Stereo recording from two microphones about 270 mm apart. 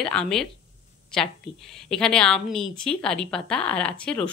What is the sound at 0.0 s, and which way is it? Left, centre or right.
A woman's voice, centre.